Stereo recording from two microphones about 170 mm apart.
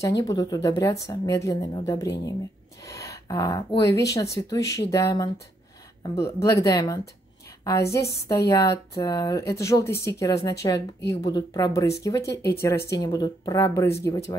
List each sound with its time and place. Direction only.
0.2 s speech: 20° left (ahead or behind)
2.8 s a sound: 20° left (ahead or behind)
4.1 s speech: 20° left (ahead or behind)